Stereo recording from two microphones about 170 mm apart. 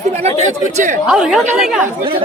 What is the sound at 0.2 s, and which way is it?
Speech, 40° right (ahead or behind).